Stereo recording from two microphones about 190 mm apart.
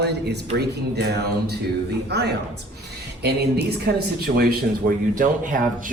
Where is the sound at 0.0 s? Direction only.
60° right (ahead or behind).